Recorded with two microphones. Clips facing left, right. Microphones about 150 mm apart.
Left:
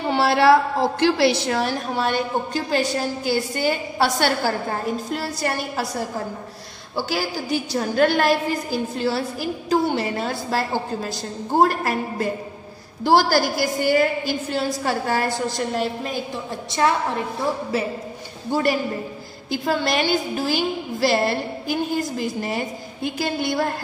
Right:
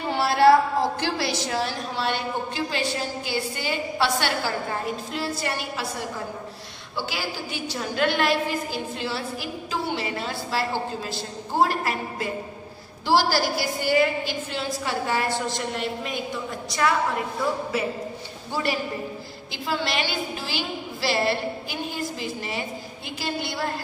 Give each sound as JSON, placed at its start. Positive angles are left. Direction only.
{"t": 0.1, "sound": "a woman's voice", "side_deg": 70}
{"t": 18.5, "sound": "a woman's voice", "side_deg": 45}